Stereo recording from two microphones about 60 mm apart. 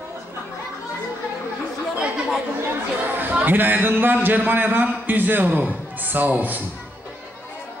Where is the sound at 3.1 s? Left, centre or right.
Right.